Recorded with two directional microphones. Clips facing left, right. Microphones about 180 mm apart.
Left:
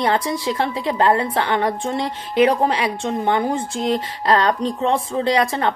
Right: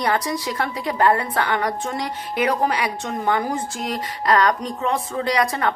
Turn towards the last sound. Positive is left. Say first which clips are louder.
# left 2 dB
turn(degrees=25)  # may be behind; listen again after turning